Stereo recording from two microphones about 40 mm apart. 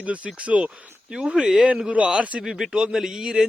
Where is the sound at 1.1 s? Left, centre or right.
Centre.